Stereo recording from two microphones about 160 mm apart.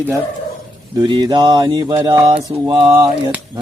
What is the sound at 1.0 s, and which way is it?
Mantra, 25° right (ahead or behind).